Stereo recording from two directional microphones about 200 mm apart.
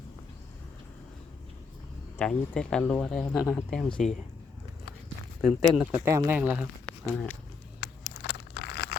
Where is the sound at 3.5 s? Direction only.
10° left (ahead or behind).